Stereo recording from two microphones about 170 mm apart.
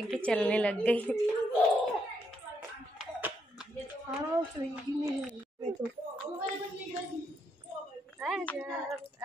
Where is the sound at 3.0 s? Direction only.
5° right (ahead or behind).